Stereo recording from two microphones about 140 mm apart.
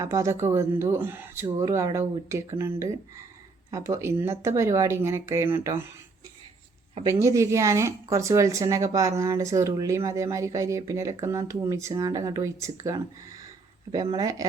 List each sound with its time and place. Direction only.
0.0 s speech: 20° right (ahead or behind)
7.1 s speech: 20° right (ahead or behind)